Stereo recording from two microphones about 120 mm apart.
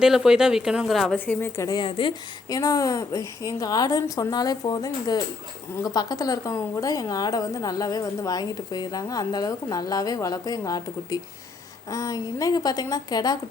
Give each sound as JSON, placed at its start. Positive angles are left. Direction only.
{"t": 0.0, "sound": "speech", "side_deg": -5}
{"t": 1.1, "sound": "speech", "side_deg": 15}
{"t": 1.6, "sound": "a woman's voice", "side_deg": 35}
{"t": 2.6, "sound": "a woman's voice", "side_deg": 30}